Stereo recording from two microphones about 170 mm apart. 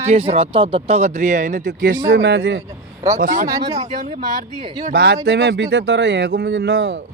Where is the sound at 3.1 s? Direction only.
50° right (ahead or behind).